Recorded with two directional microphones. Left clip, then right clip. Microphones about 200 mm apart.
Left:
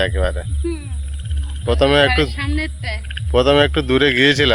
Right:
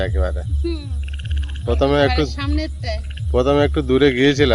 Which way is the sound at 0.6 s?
65° right (ahead or behind).